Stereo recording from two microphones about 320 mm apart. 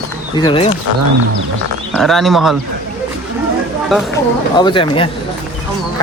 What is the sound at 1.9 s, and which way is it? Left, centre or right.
Speech, centre.